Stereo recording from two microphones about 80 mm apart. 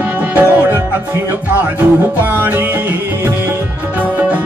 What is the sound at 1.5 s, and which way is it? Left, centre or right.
Music, right.